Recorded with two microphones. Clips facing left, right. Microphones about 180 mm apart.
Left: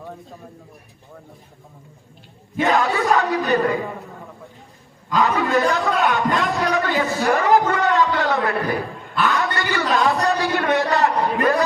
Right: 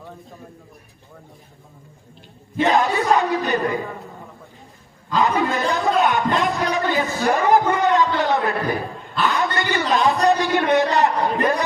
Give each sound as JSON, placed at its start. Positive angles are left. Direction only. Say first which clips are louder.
{"t": 2.6, "sound": "speech", "louder": "right 1 dB", "side_deg": -20}
{"t": 5.1, "sound": "a man's voice", "louder": "left 1 dB", "side_deg": -20}